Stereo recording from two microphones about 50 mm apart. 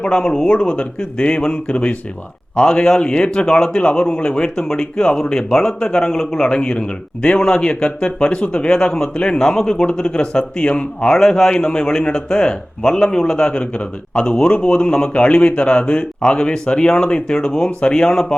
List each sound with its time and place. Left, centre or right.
0.0 s speech: centre
11.1 s speech: centre